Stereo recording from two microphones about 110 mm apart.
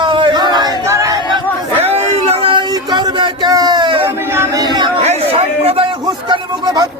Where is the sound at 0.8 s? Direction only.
25° right (ahead or behind).